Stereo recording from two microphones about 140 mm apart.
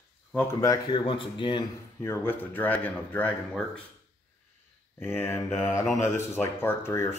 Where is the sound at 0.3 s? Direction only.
15° left (ahead or behind).